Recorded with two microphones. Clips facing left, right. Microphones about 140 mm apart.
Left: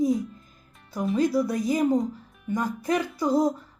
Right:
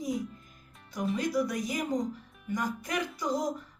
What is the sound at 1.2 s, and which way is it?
Speech, 30° left (ahead or behind).